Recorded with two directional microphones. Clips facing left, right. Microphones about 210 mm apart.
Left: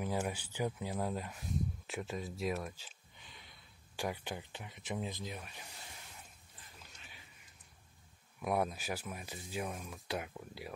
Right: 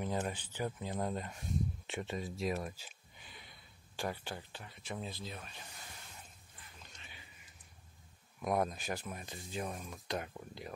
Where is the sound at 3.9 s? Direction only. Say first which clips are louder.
Left 1 dB; 15° left (ahead or behind).